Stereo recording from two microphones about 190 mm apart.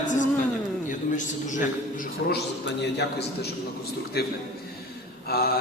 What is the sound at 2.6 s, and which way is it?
A man's voice, 65° left (ahead or behind).